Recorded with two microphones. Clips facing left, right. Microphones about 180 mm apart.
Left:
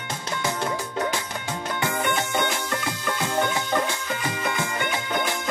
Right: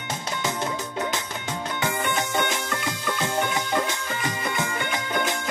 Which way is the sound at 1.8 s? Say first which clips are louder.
Left 1 dB; 20° right (ahead or behind).